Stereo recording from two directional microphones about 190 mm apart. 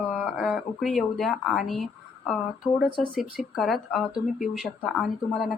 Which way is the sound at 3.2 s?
Centre (ahead or behind).